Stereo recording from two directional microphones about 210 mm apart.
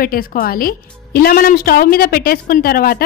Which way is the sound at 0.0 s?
45° left (ahead or behind).